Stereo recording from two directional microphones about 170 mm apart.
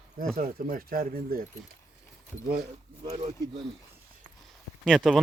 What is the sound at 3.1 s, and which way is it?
Speech, 40° right (ahead or behind).